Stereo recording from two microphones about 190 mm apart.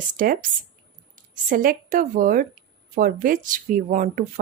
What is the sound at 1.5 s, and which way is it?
Speech, 45° right (ahead or behind).